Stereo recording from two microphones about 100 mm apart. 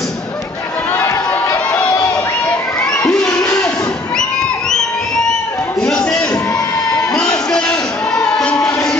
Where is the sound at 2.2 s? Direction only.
20° left (ahead or behind).